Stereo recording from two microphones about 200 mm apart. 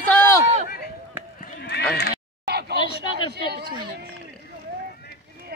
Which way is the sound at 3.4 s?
55° right (ahead or behind).